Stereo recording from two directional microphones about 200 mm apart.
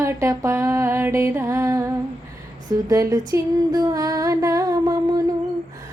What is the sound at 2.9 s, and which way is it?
Female singing, 15° right (ahead or behind).